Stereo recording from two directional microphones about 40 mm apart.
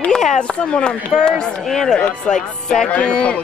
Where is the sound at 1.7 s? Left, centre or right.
Centre.